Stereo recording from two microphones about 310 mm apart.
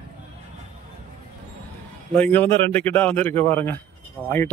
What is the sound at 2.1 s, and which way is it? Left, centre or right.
Speech, centre.